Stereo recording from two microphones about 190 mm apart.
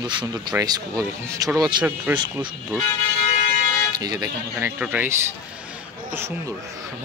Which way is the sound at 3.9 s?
20° right (ahead or behind).